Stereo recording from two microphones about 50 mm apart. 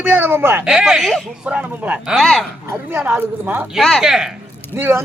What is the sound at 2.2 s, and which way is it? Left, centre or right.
Speech, centre.